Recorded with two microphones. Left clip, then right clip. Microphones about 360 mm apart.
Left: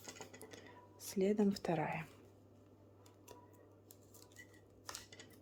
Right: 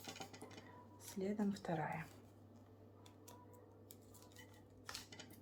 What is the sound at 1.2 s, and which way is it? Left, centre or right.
Speech, left.